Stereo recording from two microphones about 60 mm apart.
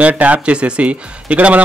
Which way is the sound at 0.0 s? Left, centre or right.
Right.